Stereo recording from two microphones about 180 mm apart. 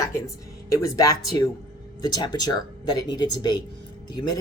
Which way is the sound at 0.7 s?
20° left (ahead or behind).